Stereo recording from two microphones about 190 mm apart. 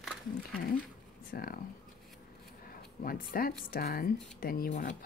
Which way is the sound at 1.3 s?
50° left (ahead or behind).